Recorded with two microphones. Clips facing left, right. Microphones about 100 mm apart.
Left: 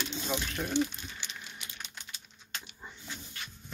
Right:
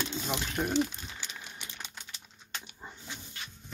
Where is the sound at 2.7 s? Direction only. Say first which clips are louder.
Right 1 dB; 20° right (ahead or behind).